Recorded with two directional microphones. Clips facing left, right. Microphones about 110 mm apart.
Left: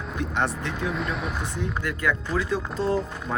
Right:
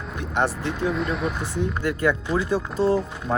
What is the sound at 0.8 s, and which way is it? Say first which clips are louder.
Speech: right 5 dB; centre (ahead or behind).